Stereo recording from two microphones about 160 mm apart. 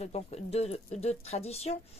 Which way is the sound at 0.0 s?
40° left (ahead or behind).